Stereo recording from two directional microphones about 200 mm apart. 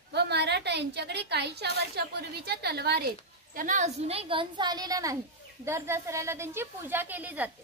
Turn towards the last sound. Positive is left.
turn(degrees=-10)  # may be behind; listen again after turning